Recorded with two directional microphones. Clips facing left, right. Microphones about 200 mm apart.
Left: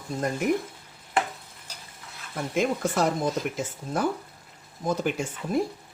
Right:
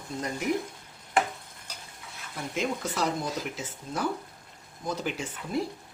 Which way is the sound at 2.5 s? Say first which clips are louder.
Left 5 dB; 50° left (ahead or behind).